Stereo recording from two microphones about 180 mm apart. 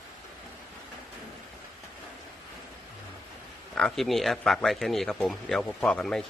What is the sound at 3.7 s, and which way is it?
Speech, centre (ahead or behind).